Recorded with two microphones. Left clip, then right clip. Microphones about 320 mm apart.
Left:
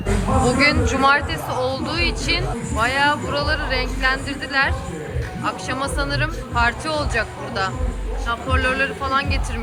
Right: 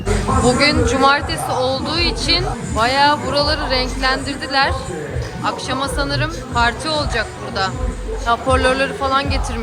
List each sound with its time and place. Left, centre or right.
0.4 s speech: centre